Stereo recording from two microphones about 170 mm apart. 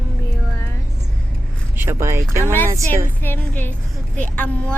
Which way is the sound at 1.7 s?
15° right (ahead or behind).